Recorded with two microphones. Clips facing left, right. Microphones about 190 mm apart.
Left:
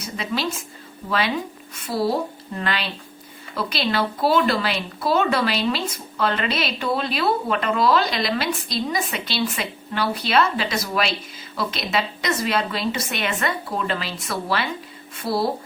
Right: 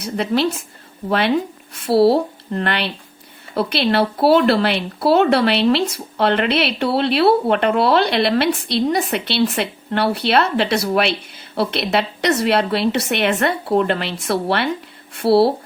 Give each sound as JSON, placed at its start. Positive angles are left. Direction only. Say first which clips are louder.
{"t": 0.0, "sound": "speech", "louder": "right 7 dB", "side_deg": -60}
{"t": 1.7, "sound": "speech", "louder": "right 9 dB", "side_deg": -65}